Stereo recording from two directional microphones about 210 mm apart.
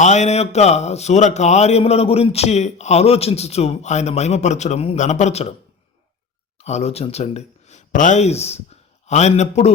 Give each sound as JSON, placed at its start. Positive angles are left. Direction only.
{"t": 0.0, "sound": "a man's voice", "side_deg": 35}
{"t": 6.6, "sound": "speech", "side_deg": 30}